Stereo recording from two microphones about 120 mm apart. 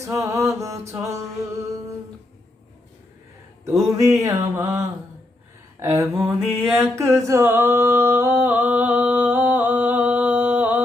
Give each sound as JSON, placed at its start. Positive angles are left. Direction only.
{"t": 0.0, "sound": "mantra", "side_deg": -25}
{"t": 3.7, "sound": "mantra", "side_deg": -25}
{"t": 6.7, "sound": "a sound", "side_deg": -20}